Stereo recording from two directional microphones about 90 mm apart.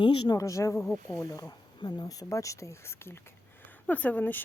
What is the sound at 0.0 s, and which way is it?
Speech, 60° left (ahead or behind).